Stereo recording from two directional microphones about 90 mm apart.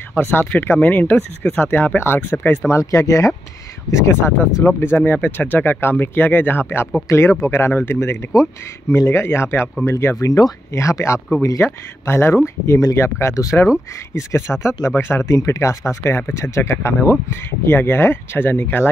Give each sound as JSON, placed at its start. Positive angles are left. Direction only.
{"t": 0.1, "sound": "speech", "side_deg": 25}
{"t": 2.7, "sound": "speech", "side_deg": 35}